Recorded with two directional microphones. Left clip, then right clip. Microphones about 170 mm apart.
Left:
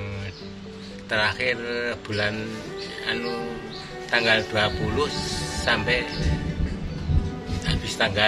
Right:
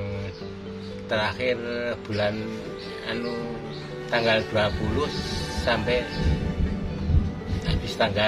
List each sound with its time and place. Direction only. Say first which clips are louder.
1.1 s speech: left 2 dB; 20° right (ahead or behind)
4.1 s speech: left 2 dB; 15° right (ahead or behind)
7.6 s a man's voice: left 1 dB; 15° right (ahead or behind)